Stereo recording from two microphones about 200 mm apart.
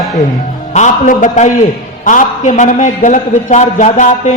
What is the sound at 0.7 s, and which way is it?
A man's voice, 35° left (ahead or behind).